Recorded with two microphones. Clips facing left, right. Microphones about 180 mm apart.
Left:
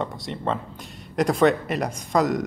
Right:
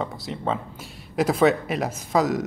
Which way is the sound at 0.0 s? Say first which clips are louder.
Even; centre (ahead or behind).